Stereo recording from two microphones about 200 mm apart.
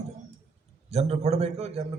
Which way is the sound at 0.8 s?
30° right (ahead or behind).